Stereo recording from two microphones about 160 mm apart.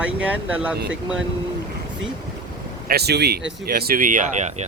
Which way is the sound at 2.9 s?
90° right.